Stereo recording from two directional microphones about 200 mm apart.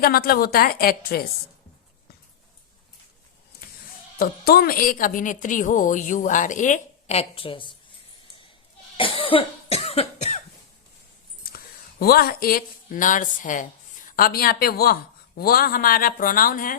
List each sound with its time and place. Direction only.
0.0 s speech: 50° left (ahead or behind)
4.2 s a woman's voice: 50° left (ahead or behind); by 7.7 s 25° left (ahead or behind)
9.0 s cough: 25° left (ahead or behind)
11.5 s speech: 50° left (ahead or behind)